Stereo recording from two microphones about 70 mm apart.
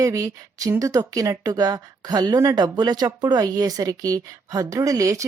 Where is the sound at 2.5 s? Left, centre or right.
Right.